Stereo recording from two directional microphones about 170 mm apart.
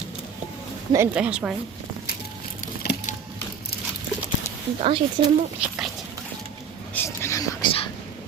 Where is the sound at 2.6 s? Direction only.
65° left (ahead or behind).